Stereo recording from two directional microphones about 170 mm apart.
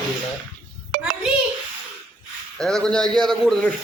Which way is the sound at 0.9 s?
60° right (ahead or behind).